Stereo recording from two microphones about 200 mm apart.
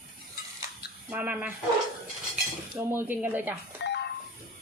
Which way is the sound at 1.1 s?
10° right (ahead or behind).